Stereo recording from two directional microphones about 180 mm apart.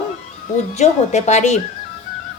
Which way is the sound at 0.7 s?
40° left (ahead or behind).